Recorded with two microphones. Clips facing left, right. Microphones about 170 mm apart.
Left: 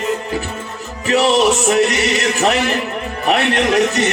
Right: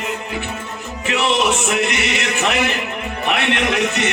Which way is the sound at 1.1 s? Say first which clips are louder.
Left 5 dB; 35° left (ahead or behind).